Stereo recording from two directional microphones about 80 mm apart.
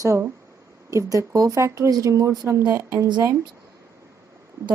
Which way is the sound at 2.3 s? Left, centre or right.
Right.